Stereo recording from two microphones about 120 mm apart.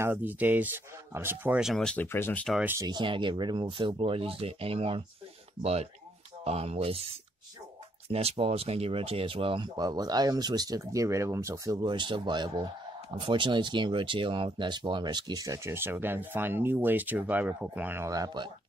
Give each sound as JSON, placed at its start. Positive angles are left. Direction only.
{"t": 0.0, "sound": "speech", "side_deg": -15}
{"t": 1.6, "sound": "speech", "side_deg": 0}
{"t": 2.0, "sound": "speech", "side_deg": 20}
{"t": 2.6, "sound": "speech", "side_deg": -20}
{"t": 2.9, "sound": "speech", "side_deg": -40}
{"t": 8.1, "sound": "speech", "side_deg": -55}
{"t": 9.8, "sound": "speech", "side_deg": -35}
{"t": 11.8, "sound": "speech", "side_deg": -40}